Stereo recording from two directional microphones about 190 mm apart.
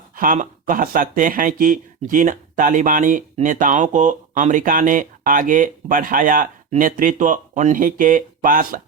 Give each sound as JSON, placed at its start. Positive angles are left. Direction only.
{"t": 0.2, "sound": "speech", "side_deg": -45}